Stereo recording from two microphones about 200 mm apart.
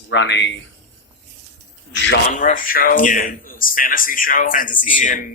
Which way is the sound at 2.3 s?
40° left (ahead or behind).